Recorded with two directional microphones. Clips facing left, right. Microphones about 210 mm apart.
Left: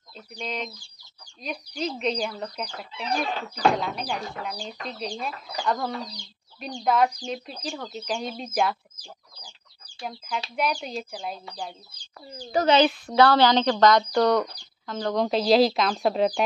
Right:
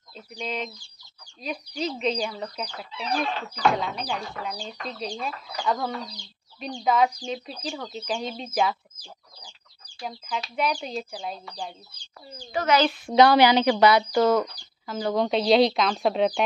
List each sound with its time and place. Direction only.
0.1 s speech: centre (ahead or behind)
9.9 s speech: centre (ahead or behind)
12.5 s speech: 30° left (ahead or behind)
13.0 s speech: 15° right (ahead or behind); by 16.4 s centre (ahead or behind)